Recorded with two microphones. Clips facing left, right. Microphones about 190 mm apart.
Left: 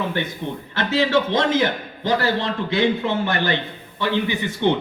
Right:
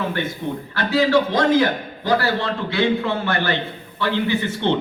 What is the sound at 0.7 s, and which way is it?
A man's voice, 20° left (ahead or behind).